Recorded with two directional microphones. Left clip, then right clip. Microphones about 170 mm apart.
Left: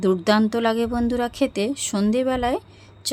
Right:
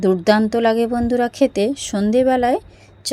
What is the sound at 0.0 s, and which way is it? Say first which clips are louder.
A woman's voice: right 4 dB; 10° right (ahead or behind).